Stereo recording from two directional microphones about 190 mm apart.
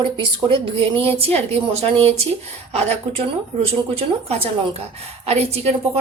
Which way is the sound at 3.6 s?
30° right (ahead or behind).